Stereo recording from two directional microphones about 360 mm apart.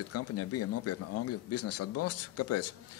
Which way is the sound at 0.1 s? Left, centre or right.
Left.